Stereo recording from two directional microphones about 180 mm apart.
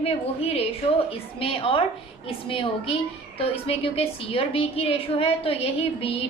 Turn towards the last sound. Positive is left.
turn(degrees=30)  # may be behind; listen again after turning